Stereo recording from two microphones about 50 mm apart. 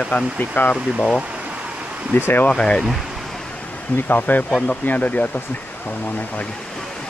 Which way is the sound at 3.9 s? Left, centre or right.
Left.